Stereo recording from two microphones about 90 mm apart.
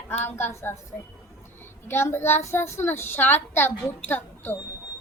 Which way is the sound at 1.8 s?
25° left (ahead or behind).